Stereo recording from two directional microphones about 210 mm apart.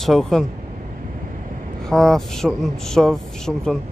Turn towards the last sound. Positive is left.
turn(degrees=0)  # may be behind; listen again after turning